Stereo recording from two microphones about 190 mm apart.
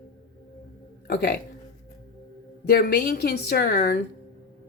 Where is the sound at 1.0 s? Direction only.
55° left (ahead or behind).